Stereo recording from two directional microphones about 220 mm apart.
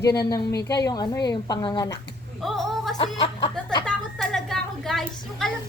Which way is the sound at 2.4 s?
Centre (ahead or behind).